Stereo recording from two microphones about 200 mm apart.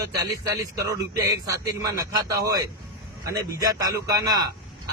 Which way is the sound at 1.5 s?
15° right (ahead or behind).